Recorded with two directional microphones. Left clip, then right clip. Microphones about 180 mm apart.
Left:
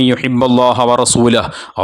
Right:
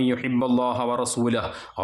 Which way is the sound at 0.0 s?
55° left (ahead or behind).